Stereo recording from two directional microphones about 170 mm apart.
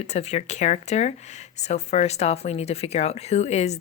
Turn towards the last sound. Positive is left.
turn(degrees=40)  # may be behind; listen again after turning